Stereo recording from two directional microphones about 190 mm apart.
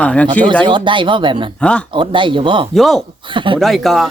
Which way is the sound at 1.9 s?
25° right (ahead or behind).